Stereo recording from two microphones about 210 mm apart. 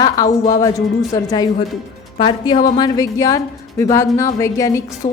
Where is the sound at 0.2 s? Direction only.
15° left (ahead or behind).